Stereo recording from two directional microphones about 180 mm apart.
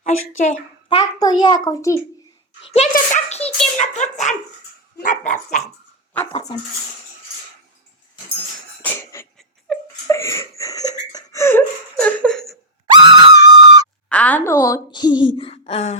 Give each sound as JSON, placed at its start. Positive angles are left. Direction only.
{"t": 0.0, "sound": "a child's voice", "side_deg": 45}
{"t": 0.9, "sound": "a child's voice", "side_deg": 25}
{"t": 2.7, "sound": "a child's voice", "side_deg": 40}
{"t": 6.3, "sound": "a child's voice", "side_deg": 30}
{"t": 10.1, "sound": "a woman's voice", "side_deg": 15}
{"t": 11.1, "sound": "a sound", "side_deg": 15}
{"t": 12.9, "sound": "screaming", "side_deg": -25}
{"t": 14.1, "sound": "a woman's voice", "side_deg": 10}